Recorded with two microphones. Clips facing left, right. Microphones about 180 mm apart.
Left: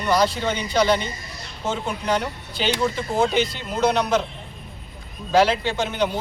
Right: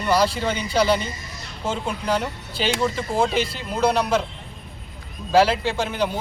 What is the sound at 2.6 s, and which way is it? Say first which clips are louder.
Speech: even; centre (ahead or behind).